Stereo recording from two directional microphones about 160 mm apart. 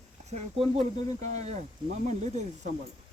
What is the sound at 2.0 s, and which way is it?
Speech, 45° right (ahead or behind).